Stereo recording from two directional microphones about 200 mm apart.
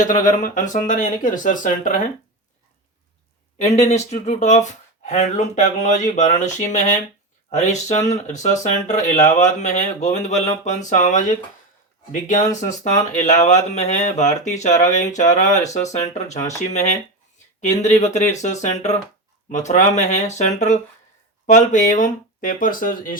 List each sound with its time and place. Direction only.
0.0 s speech: 40° left (ahead or behind)
3.6 s speech: 35° left (ahead or behind)